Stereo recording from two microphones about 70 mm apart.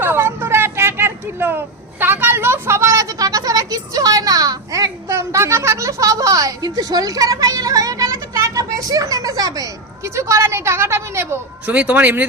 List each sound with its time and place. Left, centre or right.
0.0 s a sound: right
10.0 s a woman's voice: right
11.6 s speech: right